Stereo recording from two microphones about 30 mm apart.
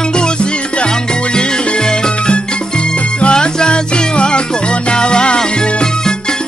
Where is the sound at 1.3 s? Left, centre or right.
Left.